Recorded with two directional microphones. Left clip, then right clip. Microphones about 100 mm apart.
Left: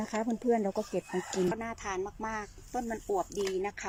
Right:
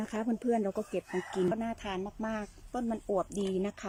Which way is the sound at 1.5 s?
25° right (ahead or behind).